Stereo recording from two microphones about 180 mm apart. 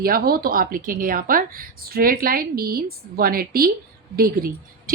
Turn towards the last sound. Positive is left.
turn(degrees=-55)  # may be behind; listen again after turning